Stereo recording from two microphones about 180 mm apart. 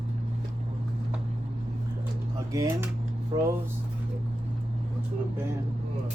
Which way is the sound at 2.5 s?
20° right (ahead or behind).